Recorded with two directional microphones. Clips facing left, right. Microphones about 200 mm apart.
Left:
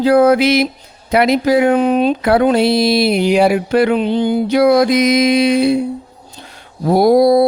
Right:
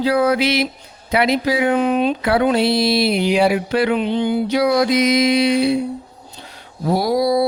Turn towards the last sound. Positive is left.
turn(degrees=50)  # may be behind; listen again after turning